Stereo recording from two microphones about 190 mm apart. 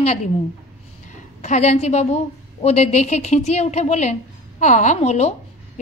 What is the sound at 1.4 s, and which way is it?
A woman's voice, 35° left (ahead or behind).